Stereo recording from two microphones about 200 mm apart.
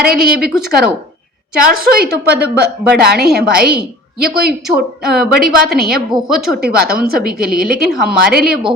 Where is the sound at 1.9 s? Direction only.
50° right (ahead or behind).